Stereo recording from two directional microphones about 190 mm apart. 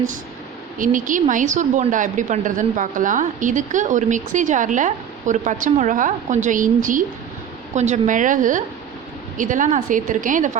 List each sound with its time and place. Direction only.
0.8 s a woman's voice: 45° right (ahead or behind)